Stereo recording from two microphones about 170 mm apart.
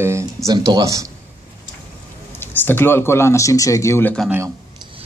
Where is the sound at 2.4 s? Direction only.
10° left (ahead or behind).